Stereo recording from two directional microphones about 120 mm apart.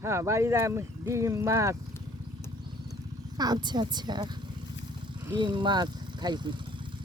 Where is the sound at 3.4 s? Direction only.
35° right (ahead or behind).